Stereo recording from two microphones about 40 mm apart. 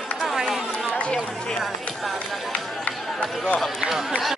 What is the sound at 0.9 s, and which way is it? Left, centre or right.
Run, left.